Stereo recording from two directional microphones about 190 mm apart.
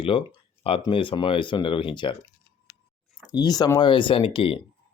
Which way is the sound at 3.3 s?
20° left (ahead or behind).